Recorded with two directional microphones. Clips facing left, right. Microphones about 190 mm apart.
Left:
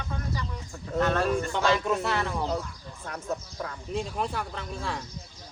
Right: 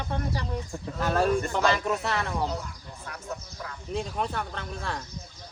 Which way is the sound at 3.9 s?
Centre (ahead or behind).